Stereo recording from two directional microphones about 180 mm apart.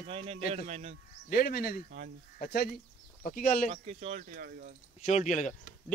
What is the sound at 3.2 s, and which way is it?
Speech, 50° left (ahead or behind).